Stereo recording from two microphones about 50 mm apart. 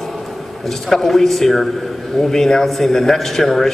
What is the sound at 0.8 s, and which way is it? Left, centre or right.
A man's voice, centre.